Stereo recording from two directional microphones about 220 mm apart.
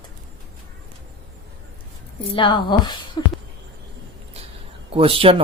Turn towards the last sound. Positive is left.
turn(degrees=-25)  # may be behind; listen again after turning